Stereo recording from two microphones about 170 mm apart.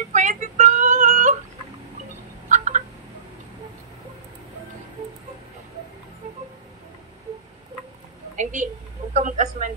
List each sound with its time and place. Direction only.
0.1 s female singing: 45° right (ahead or behind)
2.5 s fowl: 45° right (ahead or behind)
8.4 s a sound: 45° right (ahead or behind)
9.1 s a man's voice: 45° right (ahead or behind)